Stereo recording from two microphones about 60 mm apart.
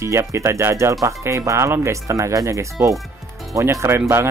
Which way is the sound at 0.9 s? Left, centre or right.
Right.